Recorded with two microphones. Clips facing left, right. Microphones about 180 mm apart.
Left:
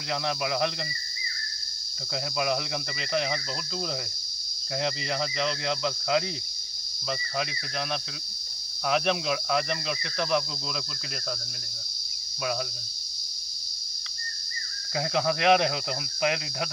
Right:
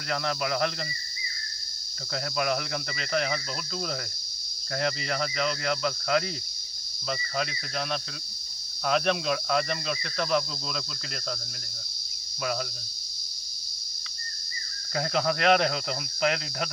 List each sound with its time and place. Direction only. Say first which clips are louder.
0.1 s speech: even; 15° left (ahead or behind)
2.1 s speech: even; 15° left (ahead or behind)
14.9 s speech: even; 10° left (ahead or behind)